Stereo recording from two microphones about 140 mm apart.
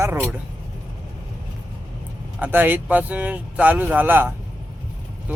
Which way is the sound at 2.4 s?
15° right (ahead or behind).